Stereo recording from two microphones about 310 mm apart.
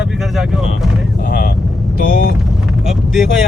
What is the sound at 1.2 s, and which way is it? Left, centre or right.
Speech, left.